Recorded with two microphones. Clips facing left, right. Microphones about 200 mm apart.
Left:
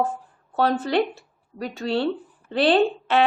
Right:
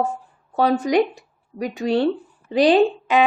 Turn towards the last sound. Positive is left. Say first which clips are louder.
# right 3 dB
turn(degrees=-10)  # may be behind; listen again after turning